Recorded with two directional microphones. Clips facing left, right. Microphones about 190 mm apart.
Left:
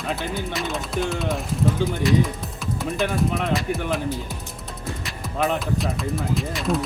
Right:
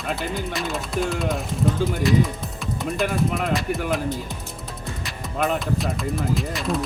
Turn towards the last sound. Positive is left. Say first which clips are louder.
# left 1 dB
turn(degrees=0)  # may be behind; listen again after turning